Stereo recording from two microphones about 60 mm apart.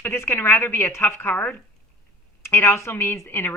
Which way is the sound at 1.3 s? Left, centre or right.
Left.